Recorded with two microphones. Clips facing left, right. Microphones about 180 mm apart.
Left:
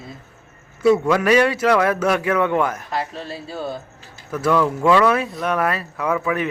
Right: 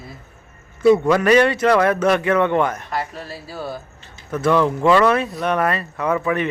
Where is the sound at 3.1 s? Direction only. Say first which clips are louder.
Left 2 dB; 25° left (ahead or behind).